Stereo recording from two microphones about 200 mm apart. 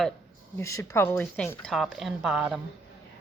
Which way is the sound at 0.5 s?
15° left (ahead or behind).